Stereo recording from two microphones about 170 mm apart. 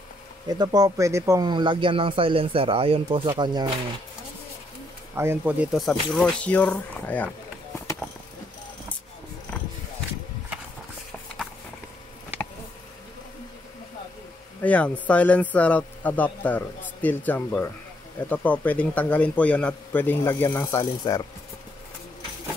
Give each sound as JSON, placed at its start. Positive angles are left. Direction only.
{"t": 0.5, "sound": "speech", "side_deg": -25}
{"t": 5.1, "sound": "speech", "side_deg": -15}
{"t": 14.6, "sound": "a man's voice", "side_deg": 10}